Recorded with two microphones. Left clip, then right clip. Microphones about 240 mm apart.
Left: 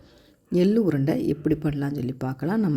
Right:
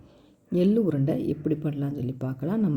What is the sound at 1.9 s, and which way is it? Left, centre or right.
Speech, left.